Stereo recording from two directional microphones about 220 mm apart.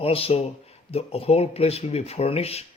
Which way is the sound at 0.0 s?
25° left (ahead or behind).